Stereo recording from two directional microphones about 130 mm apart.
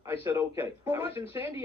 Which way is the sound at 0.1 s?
20° right (ahead or behind).